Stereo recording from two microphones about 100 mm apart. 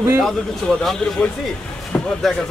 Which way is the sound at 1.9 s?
10° left (ahead or behind).